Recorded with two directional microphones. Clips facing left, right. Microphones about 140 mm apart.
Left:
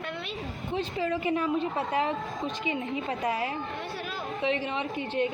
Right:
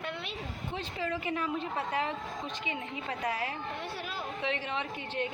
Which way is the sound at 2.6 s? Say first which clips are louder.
Left 8 dB; 20° left (ahead or behind).